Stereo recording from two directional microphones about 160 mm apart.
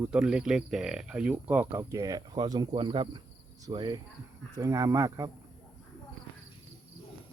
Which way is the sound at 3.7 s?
30° right (ahead or behind).